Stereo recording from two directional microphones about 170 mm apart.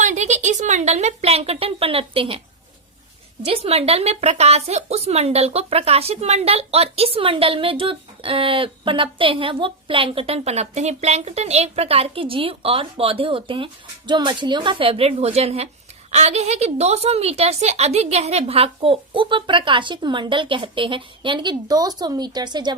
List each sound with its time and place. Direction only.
0.0 s speech: 45° right (ahead or behind)
3.4 s speech: 35° right (ahead or behind)